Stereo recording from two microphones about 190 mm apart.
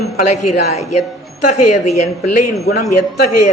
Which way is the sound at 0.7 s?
35° left (ahead or behind).